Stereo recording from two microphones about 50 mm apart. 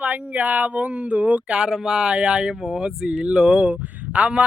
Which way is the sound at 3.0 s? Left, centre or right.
Centre.